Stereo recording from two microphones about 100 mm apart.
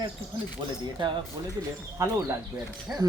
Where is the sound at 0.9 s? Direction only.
55° right (ahead or behind).